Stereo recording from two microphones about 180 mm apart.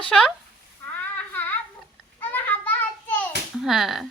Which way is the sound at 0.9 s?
10° left (ahead or behind).